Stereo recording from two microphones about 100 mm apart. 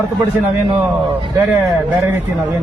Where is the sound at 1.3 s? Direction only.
25° right (ahead or behind).